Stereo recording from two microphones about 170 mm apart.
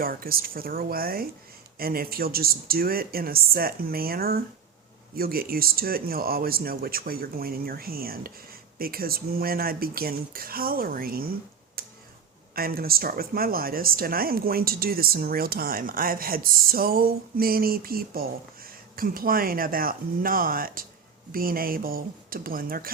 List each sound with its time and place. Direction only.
0.0 s speech: 60° right (ahead or behind)
11.8 s a sound: 60° right (ahead or behind)
12.5 s speech: 60° right (ahead or behind)